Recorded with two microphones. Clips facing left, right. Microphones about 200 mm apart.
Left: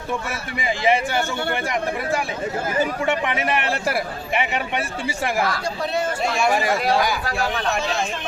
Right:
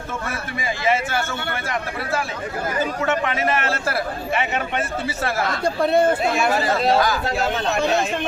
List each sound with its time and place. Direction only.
0.6 s speech: 15° left (ahead or behind)
2.8 s speech: 15° left (ahead or behind)
5.6 s speech: 55° right (ahead or behind)
6.5 s speech: 15° left (ahead or behind)
7.3 s speech: 25° right (ahead or behind)